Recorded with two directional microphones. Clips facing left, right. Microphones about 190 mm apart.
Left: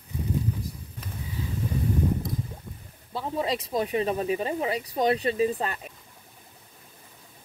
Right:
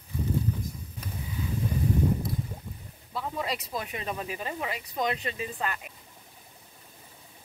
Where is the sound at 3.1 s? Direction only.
30° left (ahead or behind).